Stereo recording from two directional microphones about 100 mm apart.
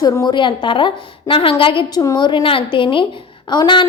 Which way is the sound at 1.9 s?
35° left (ahead or behind).